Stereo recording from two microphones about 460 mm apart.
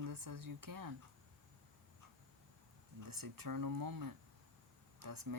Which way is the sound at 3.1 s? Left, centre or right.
Right.